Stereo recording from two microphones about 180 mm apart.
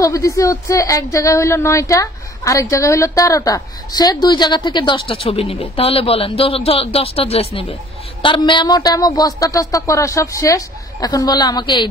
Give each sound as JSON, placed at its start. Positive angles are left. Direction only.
{"t": 0.0, "sound": "a woman's voice", "side_deg": 20}